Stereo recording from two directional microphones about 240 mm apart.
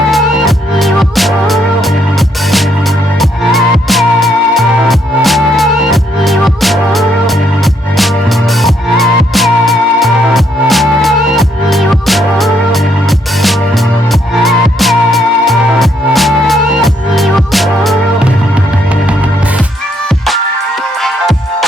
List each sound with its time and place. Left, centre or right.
0.1 s music: centre